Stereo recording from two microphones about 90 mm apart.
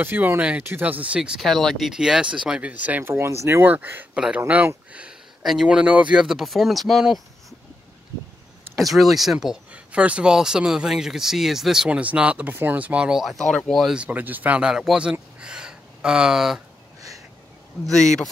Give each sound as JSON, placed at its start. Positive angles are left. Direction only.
{"t": 0.0, "sound": "speech", "side_deg": -25}
{"t": 1.4, "sound": "speech", "side_deg": 0}
{"t": 5.4, "sound": "speech", "side_deg": 0}
{"t": 5.7, "sound": "speech", "side_deg": -10}
{"t": 8.7, "sound": "speech", "side_deg": 0}
{"t": 13.8, "sound": "speech", "side_deg": -10}
{"t": 15.4, "sound": "a sound", "side_deg": -10}
{"t": 17.8, "sound": "speech", "side_deg": 5}